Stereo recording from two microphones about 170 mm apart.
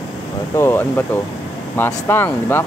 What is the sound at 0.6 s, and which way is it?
Speech, 15° left (ahead or behind).